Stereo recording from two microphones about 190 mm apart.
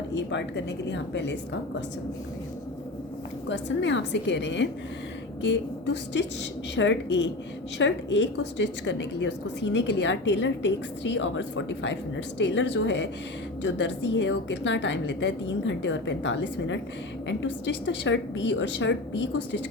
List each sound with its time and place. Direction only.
0.1 s a woman's voice: 65° left (ahead or behind)
3.5 s a woman's voice: 70° left (ahead or behind)